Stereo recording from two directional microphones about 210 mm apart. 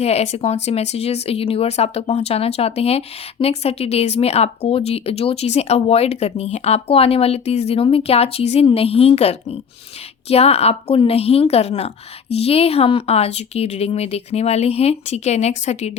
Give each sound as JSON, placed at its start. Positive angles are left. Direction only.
{"t": 0.0, "sound": "speech", "side_deg": 30}